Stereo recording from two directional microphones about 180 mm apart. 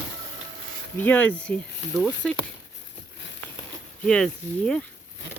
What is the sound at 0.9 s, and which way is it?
Speech, 10° left (ahead or behind).